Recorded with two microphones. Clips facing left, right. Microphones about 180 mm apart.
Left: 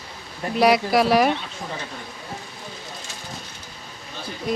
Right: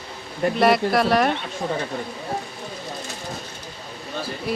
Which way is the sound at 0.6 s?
Centre (ahead or behind).